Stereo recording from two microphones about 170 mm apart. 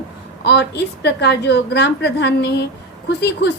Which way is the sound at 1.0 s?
80° left.